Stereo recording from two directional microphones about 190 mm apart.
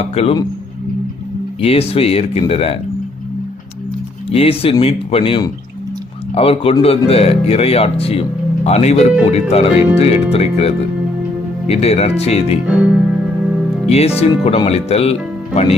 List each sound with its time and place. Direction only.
0.0 s speech: 30° left (ahead or behind)
1.6 s speech: 30° left (ahead or behind)
4.3 s speech: 30° left (ahead or behind)
11.7 s speech: 35° left (ahead or behind)
12.6 s speech: 5° right (ahead or behind)
13.9 s speech: 35° left (ahead or behind)